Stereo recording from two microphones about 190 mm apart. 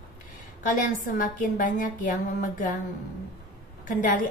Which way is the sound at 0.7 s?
45° left (ahead or behind).